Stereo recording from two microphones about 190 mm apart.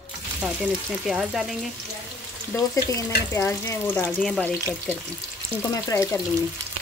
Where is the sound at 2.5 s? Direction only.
15° left (ahead or behind).